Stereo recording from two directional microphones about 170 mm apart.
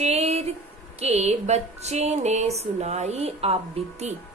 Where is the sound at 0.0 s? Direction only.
40° right (ahead or behind).